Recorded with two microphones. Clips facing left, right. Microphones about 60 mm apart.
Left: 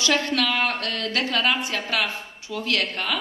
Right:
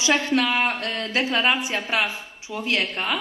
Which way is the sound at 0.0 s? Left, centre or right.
Centre.